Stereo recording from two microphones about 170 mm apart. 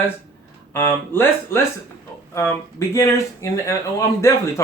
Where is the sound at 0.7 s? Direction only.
15° left (ahead or behind).